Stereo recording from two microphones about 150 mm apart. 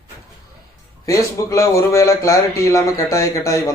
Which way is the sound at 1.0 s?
20° left (ahead or behind).